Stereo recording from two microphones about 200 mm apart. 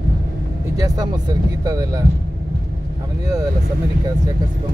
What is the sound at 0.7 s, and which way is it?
Speech, 20° right (ahead or behind).